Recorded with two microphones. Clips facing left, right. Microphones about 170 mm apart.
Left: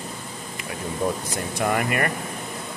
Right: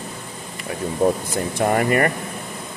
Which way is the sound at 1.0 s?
45° right (ahead or behind).